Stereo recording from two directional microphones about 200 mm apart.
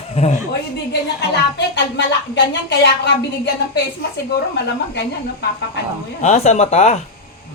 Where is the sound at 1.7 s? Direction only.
60° left (ahead or behind).